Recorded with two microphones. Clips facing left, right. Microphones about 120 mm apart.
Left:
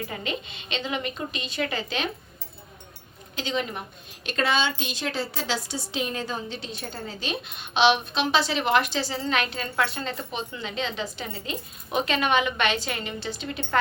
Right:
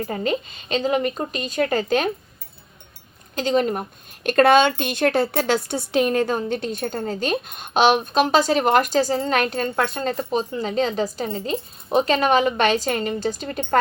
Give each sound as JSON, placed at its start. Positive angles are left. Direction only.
{"t": 0.0, "sound": "a woman's voice", "side_deg": -40}
{"t": 3.3, "sound": "a woman's voice", "side_deg": -45}